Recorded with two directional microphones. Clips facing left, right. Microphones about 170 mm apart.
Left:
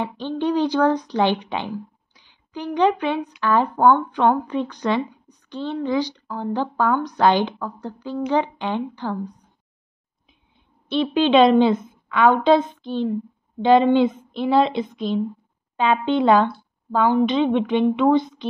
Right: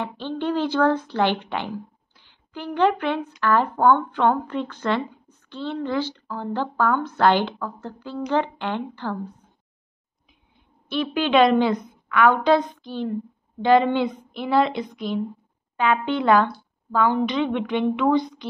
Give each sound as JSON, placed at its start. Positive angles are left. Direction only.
{"t": 0.0, "sound": "a woman's voice", "side_deg": 15}
{"t": 10.9, "sound": "a woman's voice", "side_deg": 25}